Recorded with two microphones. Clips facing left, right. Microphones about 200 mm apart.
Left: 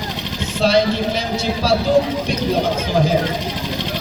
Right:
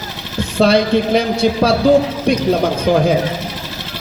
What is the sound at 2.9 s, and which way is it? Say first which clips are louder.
Speech: right 7 dB; 55° right (ahead or behind).